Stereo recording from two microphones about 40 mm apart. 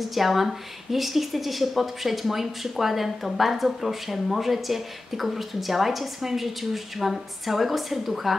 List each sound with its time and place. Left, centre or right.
0.0 s speech: centre